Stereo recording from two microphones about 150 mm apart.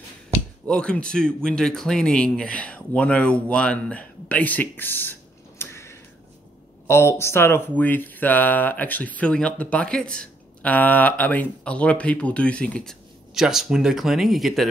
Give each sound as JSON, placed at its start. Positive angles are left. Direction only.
{"t": 0.7, "sound": "speech", "side_deg": 5}
{"t": 5.6, "sound": "tick-tock", "side_deg": 20}
{"t": 6.9, "sound": "speech", "side_deg": 15}